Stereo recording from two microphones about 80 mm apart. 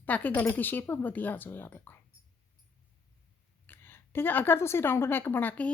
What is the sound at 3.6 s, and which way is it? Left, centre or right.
Speech, left.